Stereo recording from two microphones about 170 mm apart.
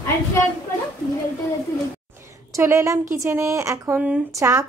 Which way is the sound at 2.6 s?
20° right (ahead or behind).